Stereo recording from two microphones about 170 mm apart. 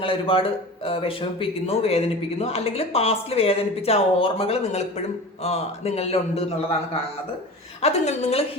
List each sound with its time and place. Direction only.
0.0 s a man's voice: 30° left (ahead or behind)
7.8 s a man's voice: 40° left (ahead or behind)